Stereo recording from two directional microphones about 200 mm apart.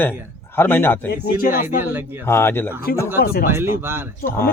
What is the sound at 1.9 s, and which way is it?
Speech, 10° right (ahead or behind).